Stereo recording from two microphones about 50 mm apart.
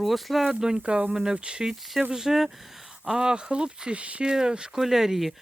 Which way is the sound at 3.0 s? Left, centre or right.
Centre.